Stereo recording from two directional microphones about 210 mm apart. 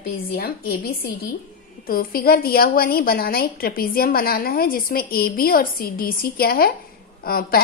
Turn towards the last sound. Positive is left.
turn(degrees=45)  # may be behind; listen again after turning